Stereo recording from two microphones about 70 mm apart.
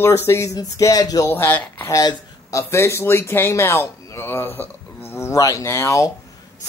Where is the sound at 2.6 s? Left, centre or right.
Left.